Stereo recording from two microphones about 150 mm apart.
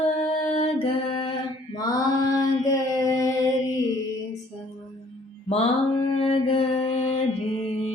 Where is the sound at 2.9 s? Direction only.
20° left (ahead or behind).